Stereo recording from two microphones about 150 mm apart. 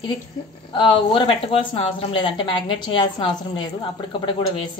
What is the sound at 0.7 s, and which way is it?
A woman's voice, 30° left (ahead or behind).